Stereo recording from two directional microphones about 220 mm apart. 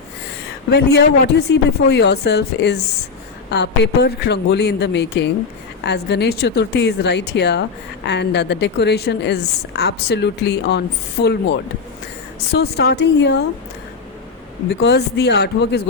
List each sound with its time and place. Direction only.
0.7 s a woman's voice: 50° left (ahead or behind)
12.5 s a woman's voice: 50° left (ahead or behind)
14.8 s a woman's voice: 50° left (ahead or behind)